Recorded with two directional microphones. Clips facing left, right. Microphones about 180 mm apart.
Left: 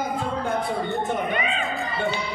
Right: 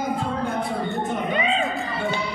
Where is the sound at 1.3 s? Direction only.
30° right (ahead or behind).